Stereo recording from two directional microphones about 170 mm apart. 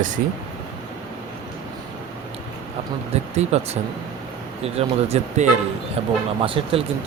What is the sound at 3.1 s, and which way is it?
Speech, 40° right (ahead or behind).